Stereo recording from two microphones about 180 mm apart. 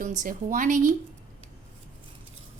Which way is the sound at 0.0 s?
45° right (ahead or behind).